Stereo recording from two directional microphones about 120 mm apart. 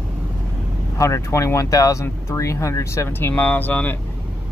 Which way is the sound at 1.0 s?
25° left (ahead or behind).